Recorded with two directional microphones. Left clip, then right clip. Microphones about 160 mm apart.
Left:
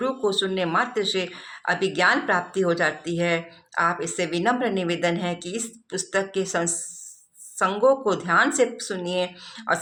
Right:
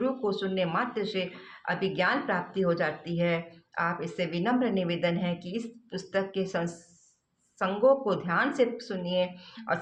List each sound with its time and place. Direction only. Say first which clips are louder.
0.0 s speech: left 6 dB; 30° left (ahead or behind)